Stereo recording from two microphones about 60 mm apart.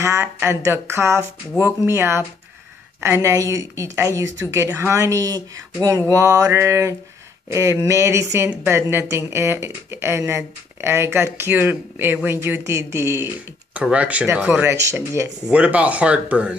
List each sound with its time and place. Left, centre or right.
0.0 s speech: right
3.0 s a sound: right
3.3 s a sound: right
4.6 s speech: right
5.2 s a sound: right
8.6 s speech: right
13.7 s speech: right
14.3 s speech: right
15.4 s speech: right